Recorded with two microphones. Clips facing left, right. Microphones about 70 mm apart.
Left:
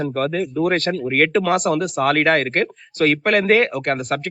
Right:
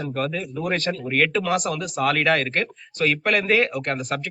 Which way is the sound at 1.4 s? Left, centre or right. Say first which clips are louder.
Left 6 dB; left.